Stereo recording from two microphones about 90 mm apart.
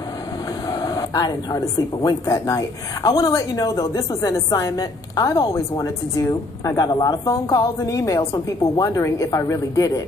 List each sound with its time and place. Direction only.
0.7 s a sound: 45° left (ahead or behind)
2.0 s a woman's voice: 40° left (ahead or behind)
6.8 s a woman's voice: 45° left (ahead or behind)